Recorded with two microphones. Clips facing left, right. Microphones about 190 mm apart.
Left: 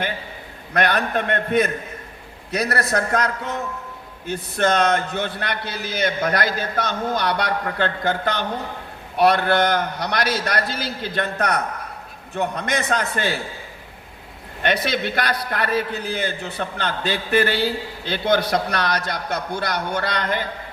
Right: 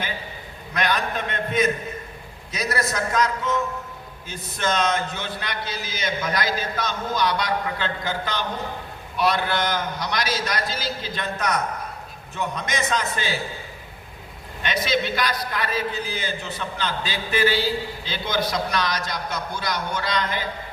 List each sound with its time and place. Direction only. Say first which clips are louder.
0.7 s a man's voice: left 4 dB; 60° left (ahead or behind)
14.6 s a man's voice: left 2 dB; 60° left (ahead or behind)